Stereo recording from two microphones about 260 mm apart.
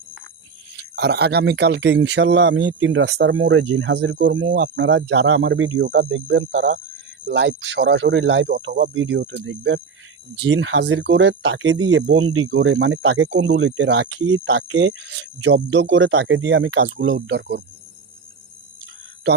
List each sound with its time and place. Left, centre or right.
0.8 s speech: right